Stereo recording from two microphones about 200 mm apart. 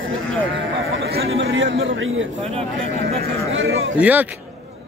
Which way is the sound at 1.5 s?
65° right (ahead or behind).